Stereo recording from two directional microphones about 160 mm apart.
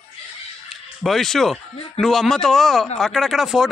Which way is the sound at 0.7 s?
Centre (ahead or behind).